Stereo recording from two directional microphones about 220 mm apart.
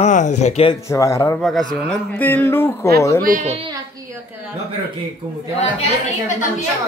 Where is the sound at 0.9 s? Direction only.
15° left (ahead or behind).